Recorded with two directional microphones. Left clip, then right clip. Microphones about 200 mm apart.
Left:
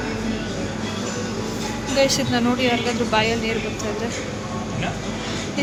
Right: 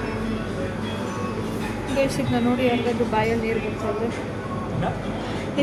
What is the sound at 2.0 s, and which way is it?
A woman's voice, 5° right (ahead or behind).